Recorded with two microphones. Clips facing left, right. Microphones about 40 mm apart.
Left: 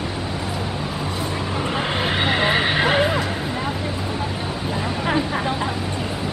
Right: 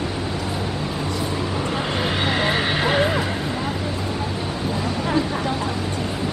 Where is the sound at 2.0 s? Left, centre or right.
Left.